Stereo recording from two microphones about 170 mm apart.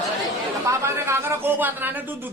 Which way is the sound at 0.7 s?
15° right (ahead or behind).